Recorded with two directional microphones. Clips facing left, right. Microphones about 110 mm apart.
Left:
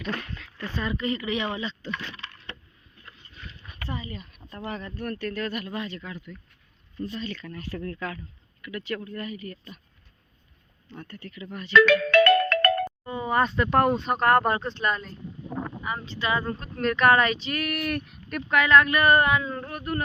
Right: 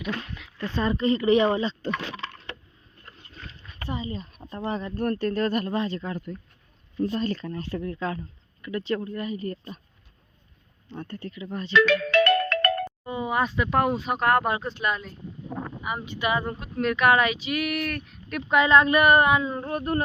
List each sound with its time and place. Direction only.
0.2 s a sound: 15° right (ahead or behind)
0.8 s speech: 30° right (ahead or behind)
1.9 s speech: 90° right
3.8 s speech: 25° right (ahead or behind); by 7.4 s 45° right (ahead or behind)
7.4 s speech: 30° right (ahead or behind)
7.8 s speech: 15° right (ahead or behind)
8.6 s speech: 25° right (ahead or behind)
10.8 s speech: 25° right (ahead or behind)
12.4 s ringtone: 90° left
13.1 s speech: 15° right (ahead or behind)
16.7 s speech: 5° right (ahead or behind)
18.4 s speech: 20° right (ahead or behind)